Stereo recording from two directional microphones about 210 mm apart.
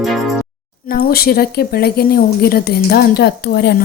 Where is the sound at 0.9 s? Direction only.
50° left (ahead or behind).